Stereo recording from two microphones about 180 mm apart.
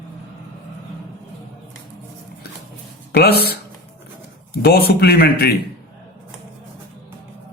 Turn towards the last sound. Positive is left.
turn(degrees=60)  # may be behind; listen again after turning